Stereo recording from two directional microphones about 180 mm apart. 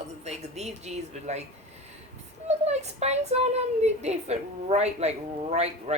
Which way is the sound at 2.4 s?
40° right (ahead or behind).